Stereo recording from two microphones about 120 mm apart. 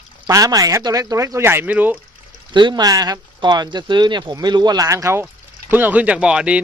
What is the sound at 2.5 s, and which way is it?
Speech, 40° right (ahead or behind).